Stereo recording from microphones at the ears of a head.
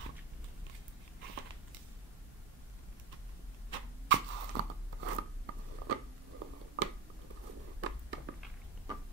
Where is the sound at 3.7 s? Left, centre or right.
Right.